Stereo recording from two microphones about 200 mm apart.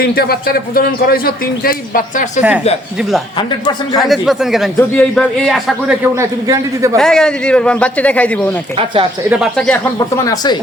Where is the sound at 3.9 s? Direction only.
Centre (ahead or behind).